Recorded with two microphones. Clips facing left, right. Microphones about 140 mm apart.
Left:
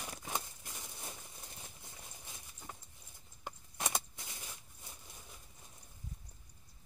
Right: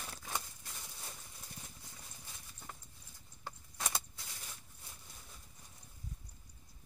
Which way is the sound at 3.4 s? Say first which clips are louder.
Left 2 dB; 20° left (ahead or behind).